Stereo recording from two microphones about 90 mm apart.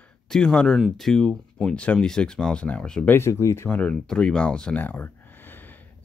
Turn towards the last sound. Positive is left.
turn(degrees=20)  # may be behind; listen again after turning